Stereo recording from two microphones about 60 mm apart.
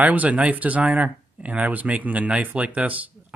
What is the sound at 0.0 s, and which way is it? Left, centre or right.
Speech, right.